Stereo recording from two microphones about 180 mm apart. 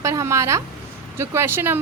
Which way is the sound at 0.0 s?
15° right (ahead or behind).